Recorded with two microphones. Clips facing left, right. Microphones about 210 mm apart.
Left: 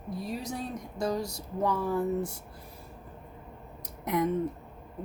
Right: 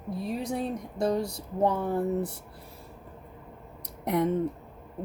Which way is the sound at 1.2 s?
60° right (ahead or behind).